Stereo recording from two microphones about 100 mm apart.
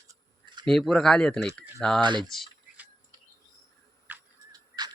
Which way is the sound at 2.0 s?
50° right (ahead or behind).